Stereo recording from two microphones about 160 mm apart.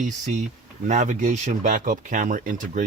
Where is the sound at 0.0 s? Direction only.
50° right (ahead or behind).